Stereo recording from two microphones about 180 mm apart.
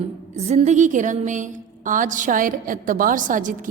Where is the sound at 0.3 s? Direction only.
40° right (ahead or behind).